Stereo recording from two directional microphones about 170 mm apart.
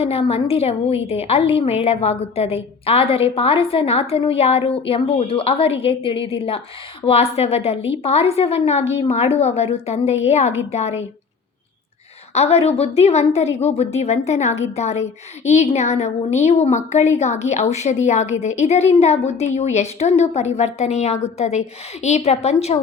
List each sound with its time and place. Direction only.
0.0 s a woman's voice: 35° left (ahead or behind)
12.3 s a woman's voice: 40° left (ahead or behind)